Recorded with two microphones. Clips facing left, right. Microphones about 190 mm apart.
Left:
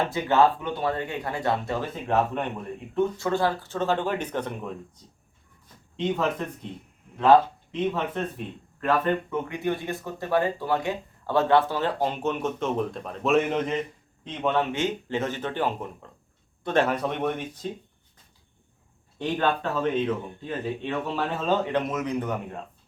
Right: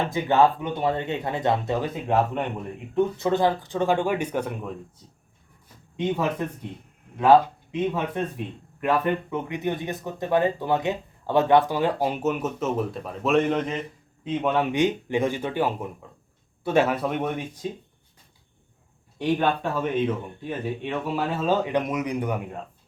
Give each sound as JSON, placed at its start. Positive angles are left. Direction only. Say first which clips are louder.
{"t": 0.1, "sound": "speech", "louder": "right 3 dB", "side_deg": -15}
{"t": 7.2, "sound": "speech", "louder": "right 1 dB", "side_deg": -10}
{"t": 14.3, "sound": "speech", "louder": "right 2 dB", "side_deg": -10}
{"t": 19.2, "sound": "speech", "louder": "right 2 dB", "side_deg": -10}